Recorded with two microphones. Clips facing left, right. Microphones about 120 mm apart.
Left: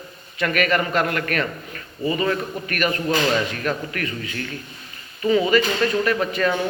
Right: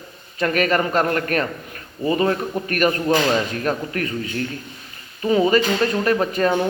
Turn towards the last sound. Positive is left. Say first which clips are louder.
# right 2 dB
turn(degrees=-35)  # may be behind; listen again after turning